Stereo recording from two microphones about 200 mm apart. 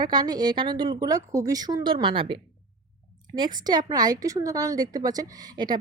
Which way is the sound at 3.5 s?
20° right (ahead or behind).